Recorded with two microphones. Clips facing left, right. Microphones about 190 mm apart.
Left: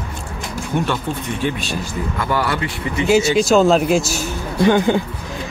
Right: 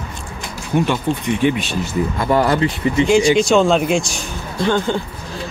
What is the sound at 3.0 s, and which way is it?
Speech, 5° left (ahead or behind).